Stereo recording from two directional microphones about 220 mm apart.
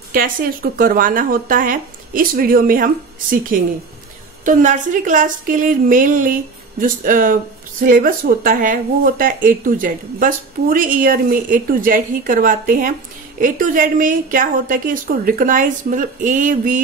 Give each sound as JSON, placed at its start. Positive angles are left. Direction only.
{"t": 0.1, "sound": "speech", "side_deg": -40}